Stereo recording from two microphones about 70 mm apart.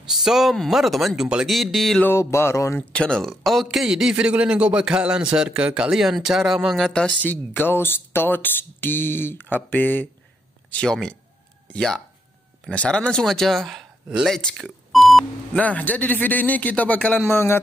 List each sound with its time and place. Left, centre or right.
0.1 s speech: centre
2.0 s music: left
2.8 s speech: centre
3.2 s speech: centre
7.2 s speech: left
10.7 s speech: centre
12.6 s speech: centre
14.9 s beep: centre
15.5 s speech: left
17.3 s music: left